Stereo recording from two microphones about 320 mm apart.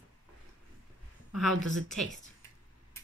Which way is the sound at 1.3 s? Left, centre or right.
Centre.